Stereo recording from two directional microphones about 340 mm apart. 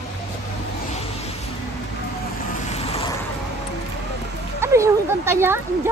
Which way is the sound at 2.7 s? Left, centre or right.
Centre.